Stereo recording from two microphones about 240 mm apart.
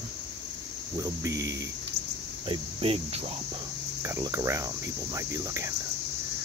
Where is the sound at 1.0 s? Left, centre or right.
Centre.